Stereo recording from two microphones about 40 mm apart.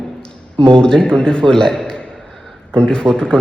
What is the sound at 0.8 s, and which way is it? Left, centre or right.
A man's voice, centre.